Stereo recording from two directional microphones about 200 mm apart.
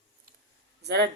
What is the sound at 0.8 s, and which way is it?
Speech, 55° right (ahead or behind).